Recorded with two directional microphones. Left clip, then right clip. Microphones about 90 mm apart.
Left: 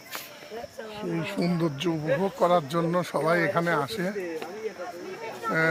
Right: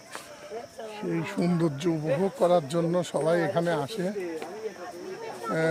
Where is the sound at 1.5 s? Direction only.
75° right (ahead or behind).